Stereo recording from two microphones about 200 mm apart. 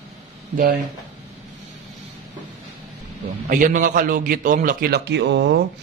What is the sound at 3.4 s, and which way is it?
A man's voice, 40° right (ahead or behind).